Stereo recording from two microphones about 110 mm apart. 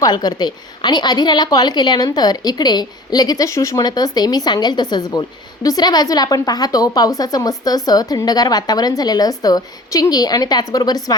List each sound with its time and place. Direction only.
0.0 s a woman's voice: 40° left (ahead or behind)